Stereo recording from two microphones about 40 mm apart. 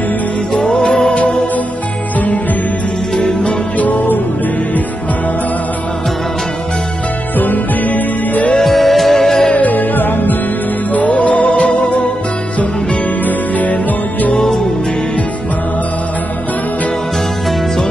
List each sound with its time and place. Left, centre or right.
1.1 s music: left
3.2 s music: left
7.3 s music: left
8.6 s music: centre
9.5 s music: left
11.1 s music: left
14.3 s music: centre